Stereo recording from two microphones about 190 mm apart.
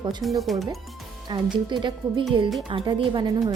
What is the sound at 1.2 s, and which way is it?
Speech, 25° right (ahead or behind).